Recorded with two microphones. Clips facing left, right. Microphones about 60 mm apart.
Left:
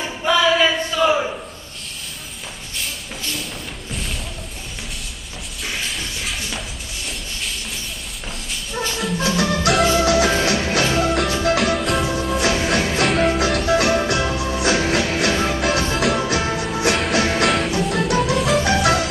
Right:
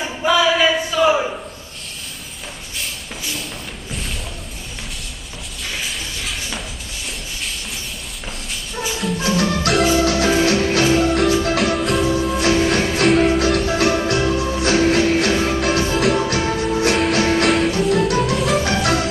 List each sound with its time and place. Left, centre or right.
0.2 s a sound: centre
2.8 s a sound: centre
5.9 s music: centre
8.9 s music: centre
10.0 s music: centre
13.7 s music: centre